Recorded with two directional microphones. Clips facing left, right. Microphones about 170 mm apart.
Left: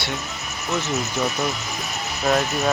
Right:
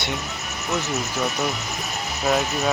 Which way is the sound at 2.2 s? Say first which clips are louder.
Left 1 dB; 5° right (ahead or behind).